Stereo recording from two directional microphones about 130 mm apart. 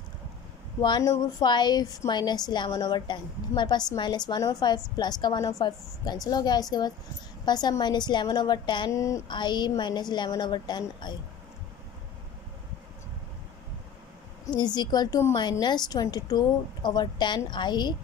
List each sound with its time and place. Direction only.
0.7 s a woman's voice: 35° left (ahead or behind)
8.9 s speech: 25° left (ahead or behind)
9.3 s a woman's voice: 35° left (ahead or behind)
14.4 s a woman's voice: 30° left (ahead or behind)